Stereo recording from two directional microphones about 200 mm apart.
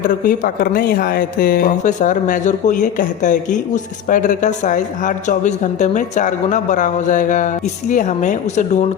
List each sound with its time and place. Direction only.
0.1 s speech: 45° left (ahead or behind)